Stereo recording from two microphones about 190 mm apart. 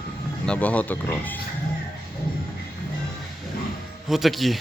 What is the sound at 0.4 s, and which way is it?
Speech, 5° left (ahead or behind).